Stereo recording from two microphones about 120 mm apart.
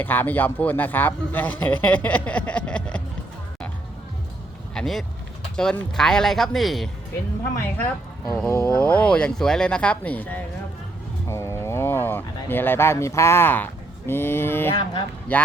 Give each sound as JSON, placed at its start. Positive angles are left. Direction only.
{"t": 0.0, "sound": "a man's voice", "side_deg": 15}
{"t": 4.7, "sound": "speech", "side_deg": 5}
{"t": 8.4, "sound": "a man's voice", "side_deg": 20}
{"t": 14.7, "sound": "speech", "side_deg": 45}
{"t": 15.3, "sound": "a man's voice", "side_deg": 15}